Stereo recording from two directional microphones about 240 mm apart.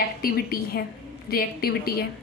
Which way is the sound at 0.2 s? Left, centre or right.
Left.